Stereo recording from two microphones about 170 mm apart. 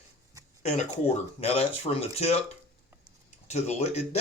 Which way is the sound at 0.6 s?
40° left (ahead or behind).